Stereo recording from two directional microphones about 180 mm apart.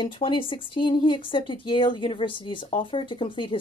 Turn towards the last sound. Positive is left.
turn(degrees=30)  # may be behind; listen again after turning